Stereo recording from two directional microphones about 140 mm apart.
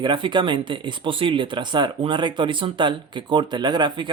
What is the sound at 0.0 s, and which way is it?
Speech, 35° right (ahead or behind).